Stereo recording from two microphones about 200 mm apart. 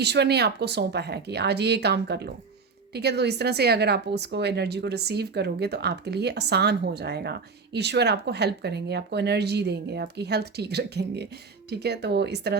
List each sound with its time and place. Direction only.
0.0 s a woman's voice: 55° right (ahead or behind)